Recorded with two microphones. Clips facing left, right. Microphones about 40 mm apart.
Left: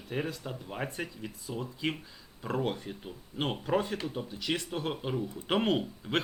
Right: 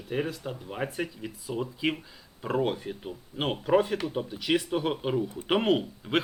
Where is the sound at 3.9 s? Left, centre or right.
Right.